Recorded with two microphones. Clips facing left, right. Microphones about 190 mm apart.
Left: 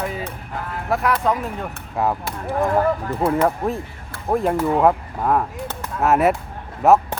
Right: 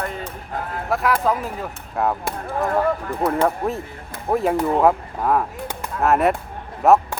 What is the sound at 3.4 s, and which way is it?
Speech, centre (ahead or behind).